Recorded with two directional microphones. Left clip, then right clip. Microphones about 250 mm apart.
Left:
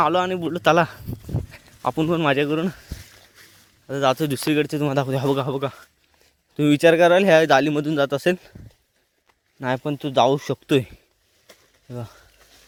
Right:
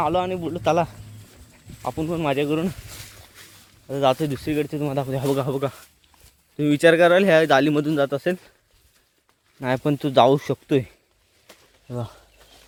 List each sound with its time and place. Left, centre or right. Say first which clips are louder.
0.0 s a man's voice: left 3 dB; left
3.8 s speech: even; centre
9.6 s speech: even; centre
9.8 s speech: right 2 dB; centre
11.4 s a sound: right 2 dB; centre